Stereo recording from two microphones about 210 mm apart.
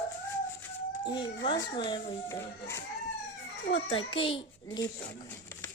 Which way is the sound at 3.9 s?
25° left (ahead or behind).